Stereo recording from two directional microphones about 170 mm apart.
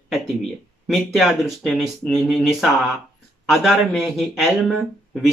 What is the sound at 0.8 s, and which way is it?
Speech, centre (ahead or behind).